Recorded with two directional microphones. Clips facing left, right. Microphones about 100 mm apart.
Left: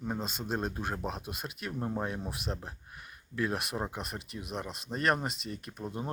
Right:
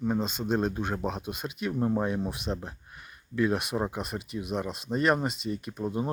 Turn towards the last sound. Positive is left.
turn(degrees=-5)  # may be behind; listen again after turning